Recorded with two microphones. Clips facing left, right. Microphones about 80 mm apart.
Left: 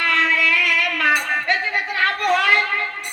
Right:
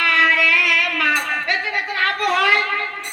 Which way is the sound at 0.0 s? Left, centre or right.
Right.